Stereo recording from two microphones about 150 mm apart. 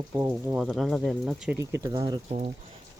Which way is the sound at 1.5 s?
20° right (ahead or behind).